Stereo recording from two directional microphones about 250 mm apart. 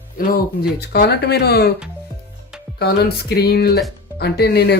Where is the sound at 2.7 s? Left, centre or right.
Left.